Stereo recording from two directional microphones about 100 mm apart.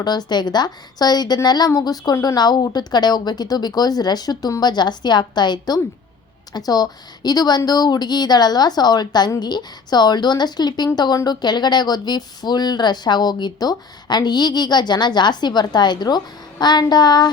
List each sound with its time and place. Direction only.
0.0 s speech: 45° left (ahead or behind)